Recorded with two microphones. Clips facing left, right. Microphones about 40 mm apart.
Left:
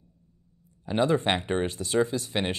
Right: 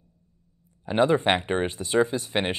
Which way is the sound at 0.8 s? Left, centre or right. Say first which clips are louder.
Right 3 dB; right.